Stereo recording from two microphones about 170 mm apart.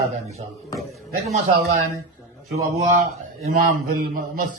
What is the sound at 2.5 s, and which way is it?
A man's voice, 45° right (ahead or behind).